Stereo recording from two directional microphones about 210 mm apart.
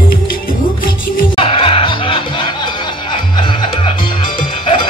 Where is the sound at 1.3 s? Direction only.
25° left (ahead or behind).